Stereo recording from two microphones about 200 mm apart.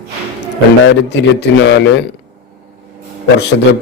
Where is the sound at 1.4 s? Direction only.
65° left (ahead or behind).